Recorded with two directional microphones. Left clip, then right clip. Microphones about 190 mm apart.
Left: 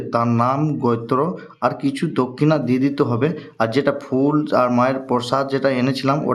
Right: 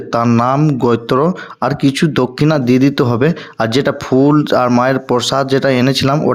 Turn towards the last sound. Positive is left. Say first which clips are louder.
# right 6 dB
turn(degrees=-35)  # may be behind; listen again after turning